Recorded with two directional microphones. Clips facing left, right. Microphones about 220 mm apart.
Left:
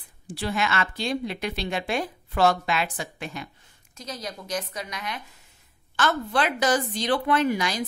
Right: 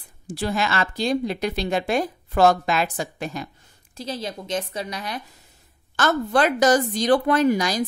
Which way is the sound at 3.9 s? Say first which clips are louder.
Right 6 dB; 30° right (ahead or behind).